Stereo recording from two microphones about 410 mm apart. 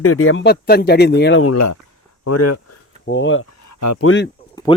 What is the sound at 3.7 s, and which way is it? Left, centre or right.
Speech, left.